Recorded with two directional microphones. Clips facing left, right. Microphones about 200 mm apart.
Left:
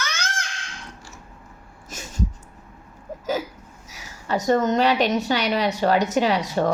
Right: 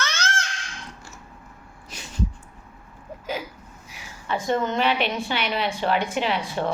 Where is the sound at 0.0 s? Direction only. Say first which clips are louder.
Right 2 dB; 10° left (ahead or behind).